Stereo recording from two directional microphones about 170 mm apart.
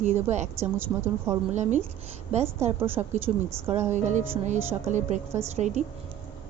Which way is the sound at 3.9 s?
45° right (ahead or behind).